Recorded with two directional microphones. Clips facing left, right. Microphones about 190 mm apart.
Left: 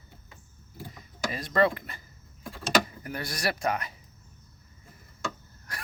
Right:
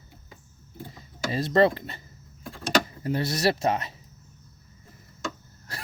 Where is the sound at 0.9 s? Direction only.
25° right (ahead or behind).